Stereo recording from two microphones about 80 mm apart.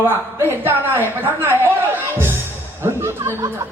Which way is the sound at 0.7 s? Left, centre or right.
Right.